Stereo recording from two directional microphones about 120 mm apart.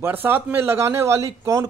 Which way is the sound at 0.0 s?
15° right (ahead or behind).